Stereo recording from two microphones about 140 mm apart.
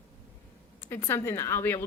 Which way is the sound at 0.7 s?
15° left (ahead or behind).